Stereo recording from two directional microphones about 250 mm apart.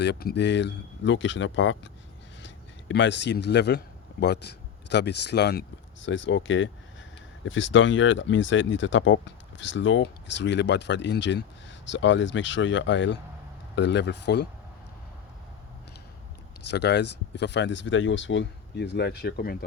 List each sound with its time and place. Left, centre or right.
0.0 s speech: left
2.9 s speech: left
16.6 s speech: left